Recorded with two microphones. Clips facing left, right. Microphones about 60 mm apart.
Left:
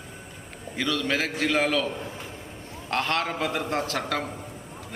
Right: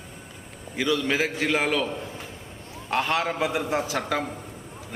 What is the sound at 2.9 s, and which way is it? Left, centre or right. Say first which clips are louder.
A man's voice: right 2 dB; centre.